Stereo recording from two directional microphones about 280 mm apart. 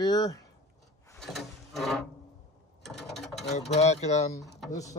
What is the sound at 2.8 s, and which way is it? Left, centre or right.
Mechanisms, centre.